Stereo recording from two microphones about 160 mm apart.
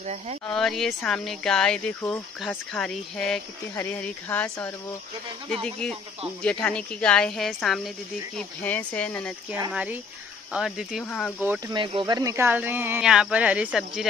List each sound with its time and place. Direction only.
0.0 s speech: 45° right (ahead or behind)
0.5 s speech: centre (ahead or behind)
9.7 s speech: 5° right (ahead or behind)
11.3 s speech: 10° right (ahead or behind)
11.7 s speech: 30° right (ahead or behind); by 14.0 s 5° right (ahead or behind)